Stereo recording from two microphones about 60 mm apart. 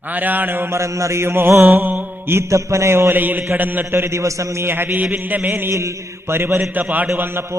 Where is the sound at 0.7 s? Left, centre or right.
Right.